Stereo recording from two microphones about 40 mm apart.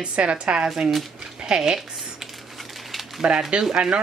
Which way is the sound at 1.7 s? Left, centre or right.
Centre.